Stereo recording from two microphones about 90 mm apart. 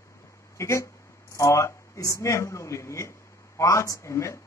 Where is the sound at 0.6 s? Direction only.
35° left (ahead or behind).